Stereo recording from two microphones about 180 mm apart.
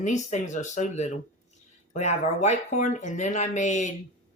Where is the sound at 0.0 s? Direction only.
40° left (ahead or behind).